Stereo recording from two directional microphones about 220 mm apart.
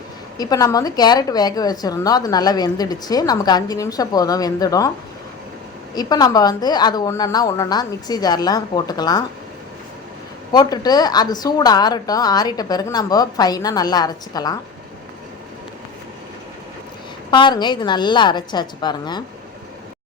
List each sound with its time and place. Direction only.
0.3 s a woman's voice: 15° left (ahead or behind)
5.9 s a woman's voice: 20° left (ahead or behind)
10.5 s a woman's voice: 20° left (ahead or behind)
17.3 s a woman's voice: 20° left (ahead or behind)